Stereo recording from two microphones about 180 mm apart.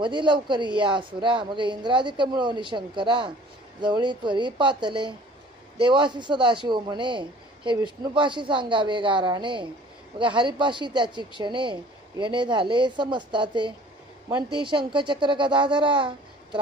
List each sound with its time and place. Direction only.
0.0 s a man's voice: 25° right (ahead or behind)